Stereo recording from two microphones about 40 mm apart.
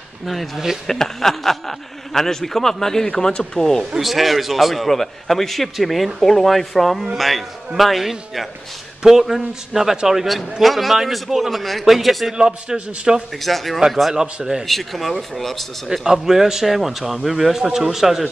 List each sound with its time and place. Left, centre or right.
0.8 s a man's voice: centre
3.9 s a man's voice: centre
12.4 s a man's voice: centre
13.4 s a man's voice: centre
15.9 s speech: centre